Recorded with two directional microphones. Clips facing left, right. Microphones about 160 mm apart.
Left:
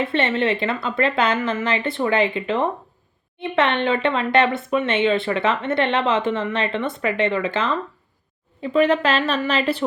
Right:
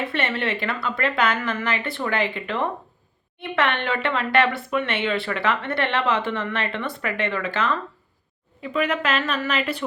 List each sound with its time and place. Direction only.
0.0 s speech: 25° left (ahead or behind)